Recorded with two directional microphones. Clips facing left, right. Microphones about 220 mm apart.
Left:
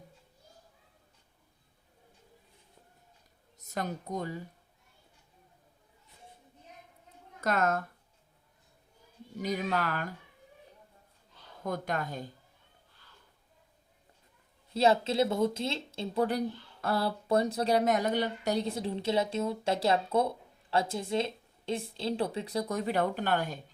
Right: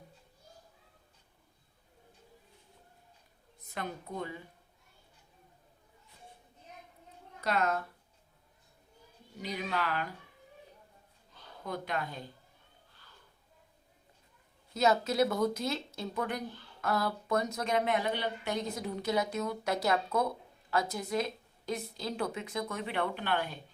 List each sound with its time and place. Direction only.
3.7 s speech: 40° left (ahead or behind)
7.4 s speech: 45° left (ahead or behind)
9.4 s speech: 45° left (ahead or behind)
11.6 s speech: 45° left (ahead or behind)
14.7 s speech: 30° left (ahead or behind)